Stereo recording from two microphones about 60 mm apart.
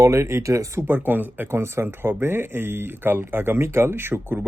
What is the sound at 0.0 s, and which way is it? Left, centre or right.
Speech, right.